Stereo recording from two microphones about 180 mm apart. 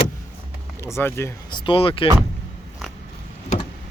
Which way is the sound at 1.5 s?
25° left (ahead or behind).